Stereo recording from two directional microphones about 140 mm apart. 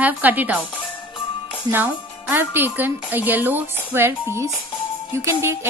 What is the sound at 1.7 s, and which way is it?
Speech, 15° right (ahead or behind).